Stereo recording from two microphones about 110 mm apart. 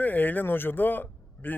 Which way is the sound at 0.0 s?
15° left (ahead or behind).